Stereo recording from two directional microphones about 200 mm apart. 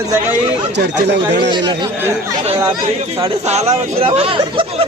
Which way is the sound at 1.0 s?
60° right (ahead or behind).